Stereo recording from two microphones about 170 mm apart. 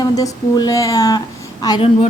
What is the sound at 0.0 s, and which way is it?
A woman's voice, 20° left (ahead or behind).